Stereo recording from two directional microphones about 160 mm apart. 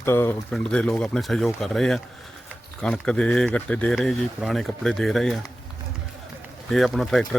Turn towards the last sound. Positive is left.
turn(degrees=0)  # may be behind; listen again after turning